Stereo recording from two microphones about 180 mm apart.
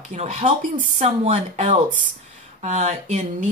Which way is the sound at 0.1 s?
40° right (ahead or behind).